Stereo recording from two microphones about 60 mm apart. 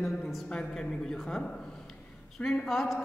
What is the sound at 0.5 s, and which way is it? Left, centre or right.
Speech, centre.